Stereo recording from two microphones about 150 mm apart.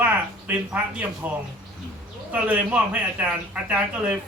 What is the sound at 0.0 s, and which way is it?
Speech, 10° right (ahead or behind).